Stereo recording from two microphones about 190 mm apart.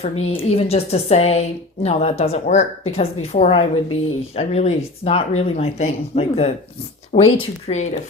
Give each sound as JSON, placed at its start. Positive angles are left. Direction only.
{"t": 0.0, "sound": "a woman's voice", "side_deg": 35}